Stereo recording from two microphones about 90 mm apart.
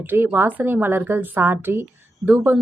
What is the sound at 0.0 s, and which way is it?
Speech, 20° right (ahead or behind).